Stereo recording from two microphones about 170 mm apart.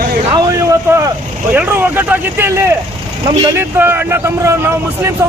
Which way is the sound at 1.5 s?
10° right (ahead or behind).